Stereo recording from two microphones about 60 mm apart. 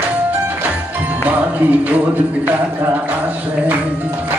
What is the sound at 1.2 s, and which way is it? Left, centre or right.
Music, right.